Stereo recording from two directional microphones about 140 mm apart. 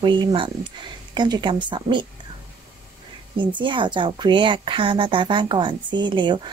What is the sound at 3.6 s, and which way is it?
A woman's voice, 35° right (ahead or behind).